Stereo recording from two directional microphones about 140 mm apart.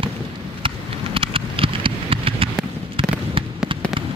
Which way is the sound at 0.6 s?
40° right (ahead or behind).